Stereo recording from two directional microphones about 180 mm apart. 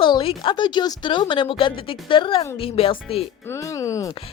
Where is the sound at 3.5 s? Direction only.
15° left (ahead or behind).